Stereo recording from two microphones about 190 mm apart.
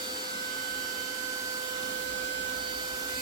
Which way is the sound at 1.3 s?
20° right (ahead or behind).